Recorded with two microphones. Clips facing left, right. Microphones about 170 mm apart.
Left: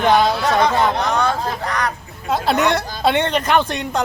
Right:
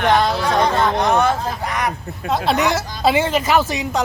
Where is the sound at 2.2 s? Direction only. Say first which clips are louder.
Left 1 dB; centre (ahead or behind).